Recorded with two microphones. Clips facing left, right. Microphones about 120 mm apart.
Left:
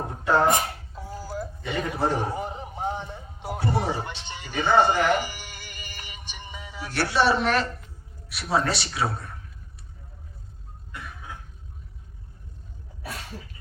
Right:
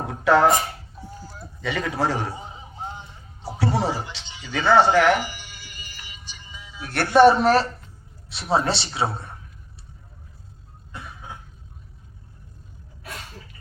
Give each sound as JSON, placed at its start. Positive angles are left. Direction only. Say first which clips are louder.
{"t": 0.1, "sound": "a sound", "louder": "right 4 dB", "side_deg": -90}
{"t": 0.9, "sound": "music", "louder": "left 6 dB", "side_deg": 90}
{"t": 1.6, "sound": "speech", "louder": "right 3 dB", "side_deg": -90}
{"t": 2.3, "sound": "music", "louder": "left 6 dB", "side_deg": 65}
{"t": 3.6, "sound": "speech", "louder": "right 3 dB", "side_deg": -90}
{"t": 4.2, "sound": "music", "louder": "left 5 dB", "side_deg": 55}
{"t": 4.4, "sound": "speech", "louder": "right 3 dB", "side_deg": -90}
{"t": 5.2, "sound": "music", "louder": "right 1 dB", "side_deg": 50}
{"t": 6.9, "sound": "a man's voice", "louder": "right 8 dB", "side_deg": -55}
{"t": 10.9, "sound": "cough", "louder": "right 1 dB", "side_deg": -25}